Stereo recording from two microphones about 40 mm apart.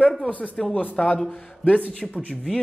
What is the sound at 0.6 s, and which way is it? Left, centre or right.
Speech, centre.